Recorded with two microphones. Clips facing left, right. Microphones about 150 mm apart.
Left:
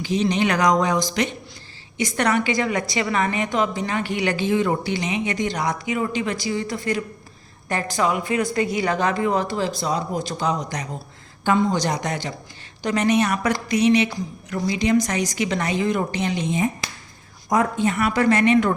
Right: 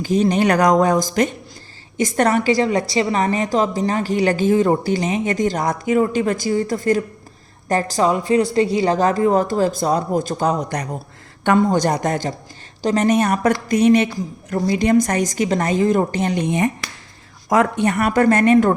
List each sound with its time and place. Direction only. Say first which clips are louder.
0.0 s a woman's voice: right 4 dB; 50° right (ahead or behind); by 16.7 s 65° right (ahead or behind)
17.5 s a woman's voice: right 4 dB; 80° right; by 18.7 s 45° right (ahead or behind)